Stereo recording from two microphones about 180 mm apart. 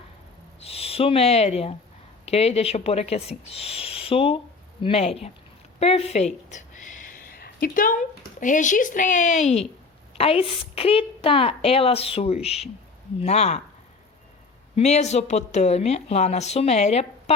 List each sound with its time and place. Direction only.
0.6 s a woman's voice: 35° left (ahead or behind)
14.8 s a woman's voice: 40° left (ahead or behind)